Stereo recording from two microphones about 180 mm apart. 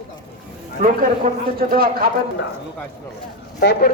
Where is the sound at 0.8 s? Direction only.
50° right (ahead or behind).